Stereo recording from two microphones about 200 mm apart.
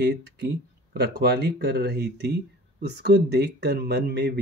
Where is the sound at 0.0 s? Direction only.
55° right (ahead or behind).